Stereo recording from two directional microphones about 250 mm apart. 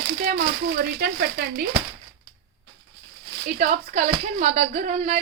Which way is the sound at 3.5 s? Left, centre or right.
Right.